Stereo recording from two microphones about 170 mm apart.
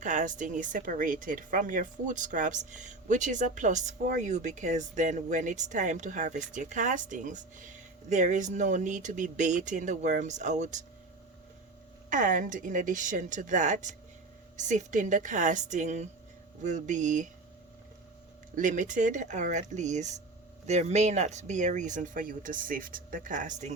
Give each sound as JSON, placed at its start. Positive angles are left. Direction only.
{"t": 0.0, "sound": "speech", "side_deg": -45}
{"t": 12.1, "sound": "speech", "side_deg": -50}
{"t": 18.5, "sound": "speech", "side_deg": -50}